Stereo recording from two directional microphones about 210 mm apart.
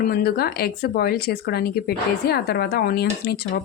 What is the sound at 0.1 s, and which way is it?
Speech, 50° left (ahead or behind).